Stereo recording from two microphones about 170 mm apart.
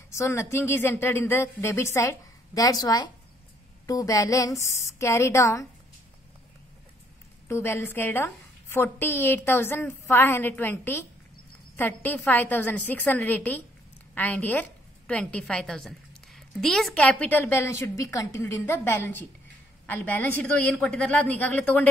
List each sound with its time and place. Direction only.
0.1 s a woman's voice: 15° left (ahead or behind)
7.4 s a woman's voice: 15° left (ahead or behind)